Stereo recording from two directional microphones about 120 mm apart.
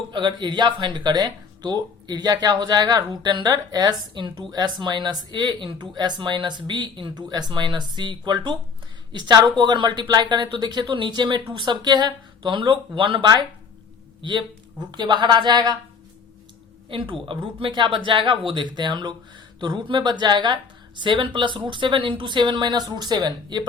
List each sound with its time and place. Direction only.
0.1 s speech: 40° right (ahead or behind)
16.9 s speech: 45° right (ahead or behind)